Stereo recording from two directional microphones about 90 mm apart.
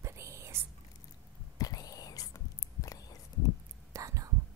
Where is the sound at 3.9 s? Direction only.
35° right (ahead or behind).